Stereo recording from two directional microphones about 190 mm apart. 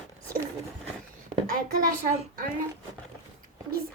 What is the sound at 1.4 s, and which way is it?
Speech, 45° right (ahead or behind).